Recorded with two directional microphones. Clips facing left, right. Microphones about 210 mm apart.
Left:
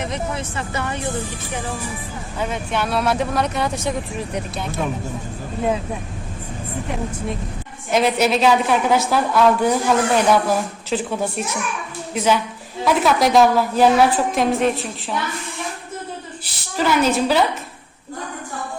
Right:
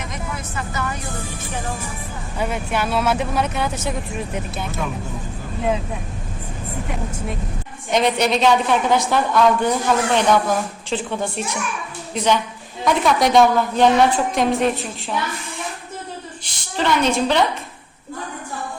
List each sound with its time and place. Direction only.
0.0 s speech: 30° left (ahead or behind)
2.4 s a woman's voice: 10° right (ahead or behind)
7.9 s a woman's voice: 5° left (ahead or behind)
16.4 s a woman's voice: 5° left (ahead or behind)